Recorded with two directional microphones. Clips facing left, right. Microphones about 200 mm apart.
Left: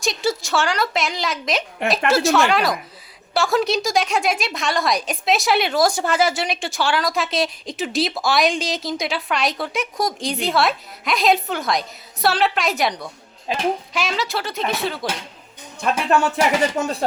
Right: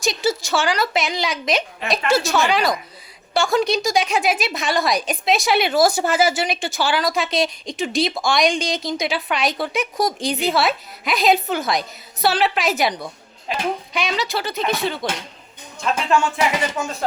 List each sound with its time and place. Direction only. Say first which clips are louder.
0.0 s a woman's voice: right 1 dB; centre (ahead or behind)
16.0 s speech: left 1 dB; 40° left (ahead or behind)